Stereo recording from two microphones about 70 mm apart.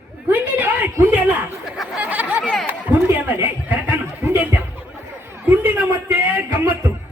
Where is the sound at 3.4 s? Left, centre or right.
Right.